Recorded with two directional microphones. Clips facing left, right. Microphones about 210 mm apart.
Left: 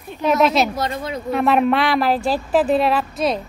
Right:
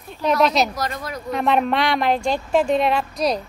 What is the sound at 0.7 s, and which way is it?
Speech, 25° left (ahead or behind).